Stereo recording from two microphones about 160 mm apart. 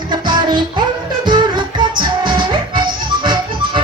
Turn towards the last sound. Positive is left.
turn(degrees=-30)  # may be behind; listen again after turning